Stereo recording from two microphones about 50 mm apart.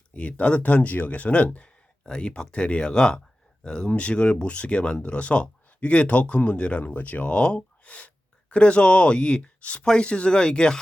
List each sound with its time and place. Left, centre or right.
0.1 s speech: left